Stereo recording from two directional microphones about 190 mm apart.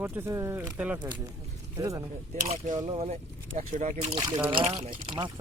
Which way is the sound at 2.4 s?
40° right (ahead or behind).